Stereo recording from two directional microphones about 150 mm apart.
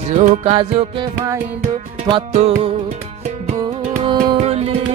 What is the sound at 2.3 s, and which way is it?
Music, 45° right (ahead or behind).